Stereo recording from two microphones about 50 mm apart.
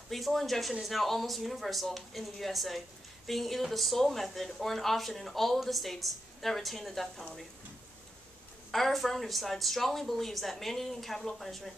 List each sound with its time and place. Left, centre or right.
0.1 s speech: centre
8.7 s speech: centre